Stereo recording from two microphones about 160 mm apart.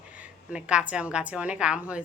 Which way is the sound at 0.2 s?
5° right (ahead or behind).